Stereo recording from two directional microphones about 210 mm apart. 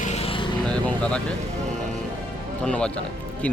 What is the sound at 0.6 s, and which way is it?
Speech, 5° left (ahead or behind).